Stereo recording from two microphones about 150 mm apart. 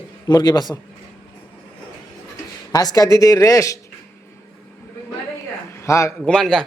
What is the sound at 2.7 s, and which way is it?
Speech, 25° left (ahead or behind).